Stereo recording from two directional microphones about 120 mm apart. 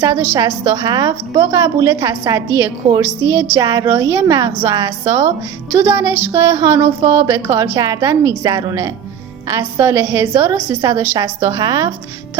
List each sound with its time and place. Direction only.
0.0 s a woman's voice: 25° right (ahead or behind)